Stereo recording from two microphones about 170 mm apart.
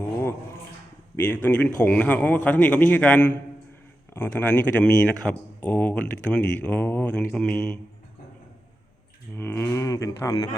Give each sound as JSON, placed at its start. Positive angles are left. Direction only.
{"t": 1.1, "sound": "speech", "side_deg": 10}
{"t": 9.3, "sound": "speech", "side_deg": 10}